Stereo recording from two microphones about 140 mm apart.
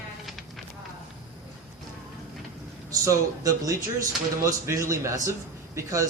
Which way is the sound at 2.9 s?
25° right (ahead or behind).